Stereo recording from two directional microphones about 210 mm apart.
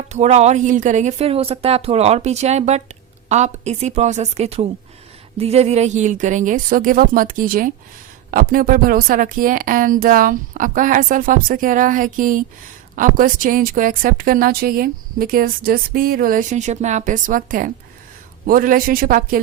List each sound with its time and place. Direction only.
0.1 s a woman's voice: 35° right (ahead or behind)